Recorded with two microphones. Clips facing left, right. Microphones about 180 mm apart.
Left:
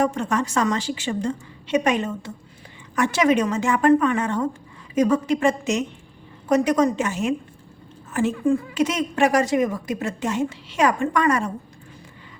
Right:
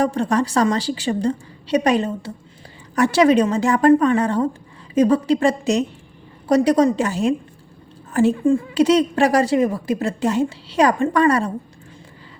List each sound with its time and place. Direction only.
0.0 s a woman's voice: 35° right (ahead or behind)